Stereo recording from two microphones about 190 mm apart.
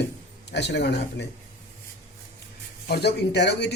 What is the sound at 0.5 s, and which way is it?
Speech, 65° left (ahead or behind).